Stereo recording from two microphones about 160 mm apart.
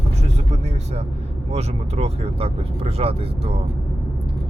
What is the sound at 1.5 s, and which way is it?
Speech, 40° right (ahead or behind).